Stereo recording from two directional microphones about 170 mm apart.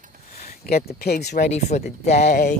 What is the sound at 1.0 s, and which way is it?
Speech, 65° left (ahead or behind).